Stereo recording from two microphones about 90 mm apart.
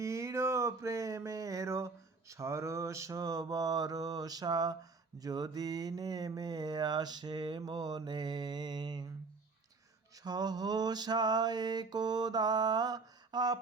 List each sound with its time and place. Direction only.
0.0 s a sound: 35° right (ahead or behind)
2.3 s mantra: 35° right (ahead or behind); by 9.0 s 50° right (ahead or behind)
10.2 s mantra: 50° right (ahead or behind)